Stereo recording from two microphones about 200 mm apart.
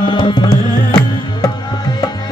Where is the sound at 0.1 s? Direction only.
20° left (ahead or behind).